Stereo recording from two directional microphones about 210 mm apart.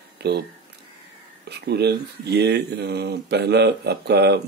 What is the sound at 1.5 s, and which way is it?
Speech, 50° right (ahead or behind).